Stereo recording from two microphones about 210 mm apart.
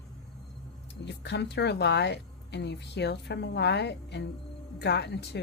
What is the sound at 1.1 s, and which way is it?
Speech, 55° left (ahead or behind).